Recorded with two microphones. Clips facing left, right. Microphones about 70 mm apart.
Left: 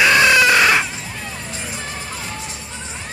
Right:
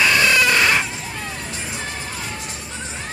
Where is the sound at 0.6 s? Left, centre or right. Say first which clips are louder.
Left 3 dB; centre.